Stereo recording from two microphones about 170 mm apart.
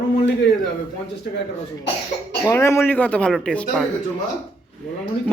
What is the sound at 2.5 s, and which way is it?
Speech, 15° left (ahead or behind).